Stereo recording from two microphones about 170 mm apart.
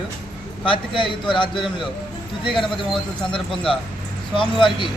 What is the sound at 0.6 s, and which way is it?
A man's voice, 30° left (ahead or behind).